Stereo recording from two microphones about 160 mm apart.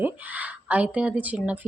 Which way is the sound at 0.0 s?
10° right (ahead or behind).